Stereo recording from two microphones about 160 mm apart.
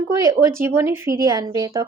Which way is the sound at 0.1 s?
20° right (ahead or behind).